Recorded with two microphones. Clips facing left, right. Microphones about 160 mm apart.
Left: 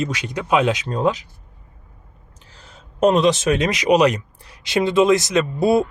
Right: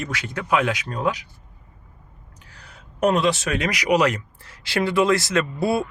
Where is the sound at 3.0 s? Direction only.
20° left (ahead or behind).